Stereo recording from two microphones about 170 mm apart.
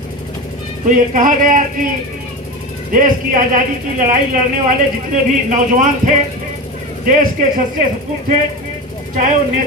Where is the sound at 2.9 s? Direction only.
50° right (ahead or behind).